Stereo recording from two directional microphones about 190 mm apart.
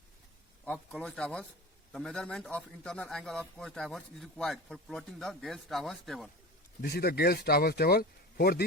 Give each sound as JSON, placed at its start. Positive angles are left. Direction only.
{"t": 0.6, "sound": "a man's voice", "side_deg": 5}
{"t": 6.8, "sound": "speech", "side_deg": 55}